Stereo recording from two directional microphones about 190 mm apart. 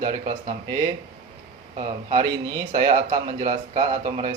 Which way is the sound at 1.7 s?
25° right (ahead or behind).